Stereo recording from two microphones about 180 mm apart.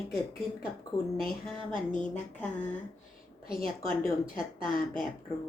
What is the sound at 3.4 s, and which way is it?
A woman's voice, 55° left (ahead or behind).